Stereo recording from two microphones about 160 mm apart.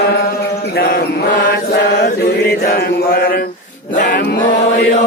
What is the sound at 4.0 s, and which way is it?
Chant, 60° left (ahead or behind).